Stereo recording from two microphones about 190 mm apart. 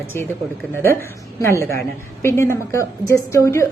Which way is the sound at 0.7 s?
10° left (ahead or behind).